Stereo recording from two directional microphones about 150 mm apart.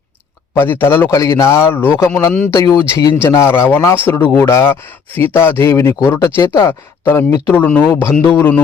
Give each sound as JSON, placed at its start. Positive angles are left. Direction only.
{"t": 0.5, "sound": "speech", "side_deg": 15}
{"t": 2.6, "sound": "speech", "side_deg": 25}